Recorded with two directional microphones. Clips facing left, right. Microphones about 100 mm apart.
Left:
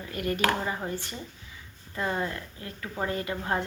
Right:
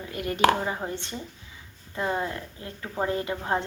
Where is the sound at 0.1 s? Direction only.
20° right (ahead or behind).